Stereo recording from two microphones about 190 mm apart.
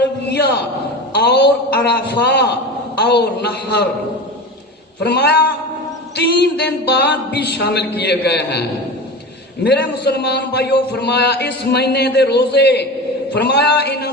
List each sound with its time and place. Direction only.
0.3 s a sound: 60° left (ahead or behind)
1.1 s a man's voice: 60° left (ahead or behind)
4.9 s a man's voice: 60° left (ahead or behind)
9.6 s a man's voice: 60° left (ahead or behind)